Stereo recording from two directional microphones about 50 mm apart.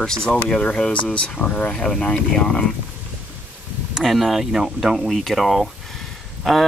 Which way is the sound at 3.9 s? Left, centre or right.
Centre.